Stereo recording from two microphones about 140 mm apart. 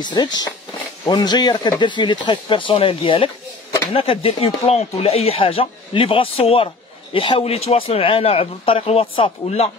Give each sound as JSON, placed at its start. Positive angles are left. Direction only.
{"t": 0.0, "sound": "speech", "side_deg": 30}